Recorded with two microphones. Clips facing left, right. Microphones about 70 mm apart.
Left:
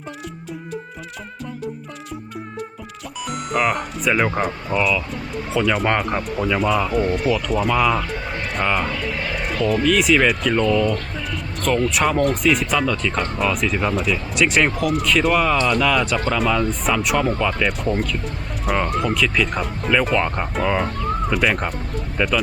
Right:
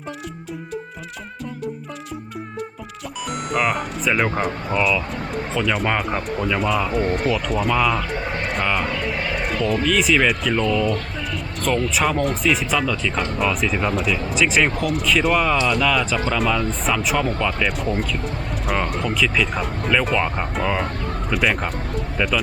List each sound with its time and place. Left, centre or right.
3.5 s speech: centre
7.0 s speech: right
7.3 s speech: centre